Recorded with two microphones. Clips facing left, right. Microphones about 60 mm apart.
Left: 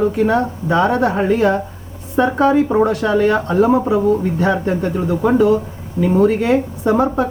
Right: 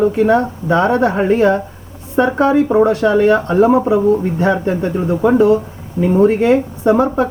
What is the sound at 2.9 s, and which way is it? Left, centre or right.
Speech, right.